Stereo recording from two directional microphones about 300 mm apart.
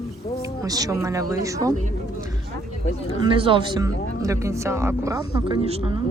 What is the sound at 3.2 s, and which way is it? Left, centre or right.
Speech, centre.